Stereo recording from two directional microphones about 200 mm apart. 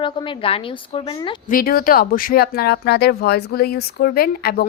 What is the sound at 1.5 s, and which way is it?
Speech, 45° left (ahead or behind).